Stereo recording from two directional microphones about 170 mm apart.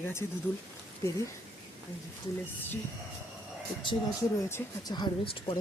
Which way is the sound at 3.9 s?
20° left (ahead or behind).